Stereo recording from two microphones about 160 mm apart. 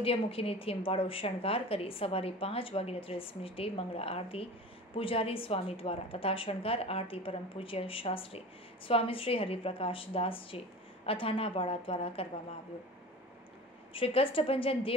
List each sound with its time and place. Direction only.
0.0 s a woman's voice: 35° left (ahead or behind)
13.9 s a woman's voice: 35° left (ahead or behind)